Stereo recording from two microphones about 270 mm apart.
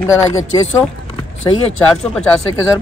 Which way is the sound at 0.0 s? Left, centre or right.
Centre.